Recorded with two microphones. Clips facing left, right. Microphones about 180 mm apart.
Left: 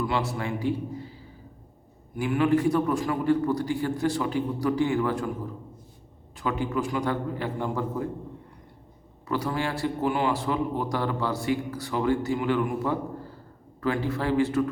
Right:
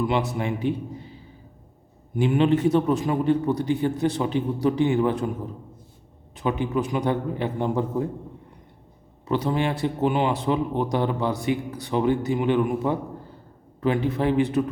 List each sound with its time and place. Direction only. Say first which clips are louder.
0.0 s a man's voice: right 4 dB; 20° right (ahead or behind)
6.3 s speech: right 3 dB; 20° right (ahead or behind)
9.2 s speech: right 4 dB; 20° right (ahead or behind)